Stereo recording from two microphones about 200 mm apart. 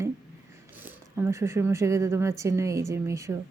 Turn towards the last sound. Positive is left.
turn(degrees=-15)  # may be behind; listen again after turning